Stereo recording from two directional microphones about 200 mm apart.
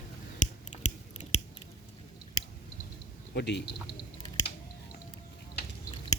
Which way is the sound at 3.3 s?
55° left (ahead or behind).